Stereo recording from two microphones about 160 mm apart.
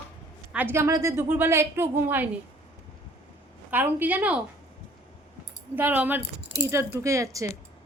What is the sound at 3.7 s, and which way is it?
Speech, 10° right (ahead or behind).